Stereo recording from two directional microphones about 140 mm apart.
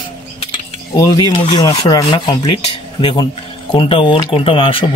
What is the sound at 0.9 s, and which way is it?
Speech, 25° left (ahead or behind).